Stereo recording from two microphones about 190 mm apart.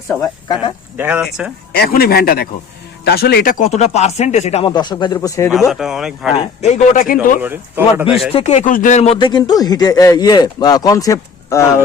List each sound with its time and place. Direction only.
0.9 s speech: 5° right (ahead or behind)
1.7 s speech: 55° left (ahead or behind); by 4.7 s 35° left (ahead or behind)
4.7 s a man's voice: 25° left (ahead or behind)
5.5 s speech: centre (ahead or behind)
6.3 s speech: 35° left (ahead or behind)
7.4 s speech: 10° right (ahead or behind)
8.3 s a man's voice: 35° left (ahead or behind); by 11.8 s 15° left (ahead or behind)